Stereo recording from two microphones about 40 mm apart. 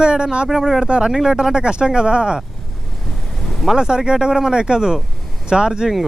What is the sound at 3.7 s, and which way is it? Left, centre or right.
Speech, centre.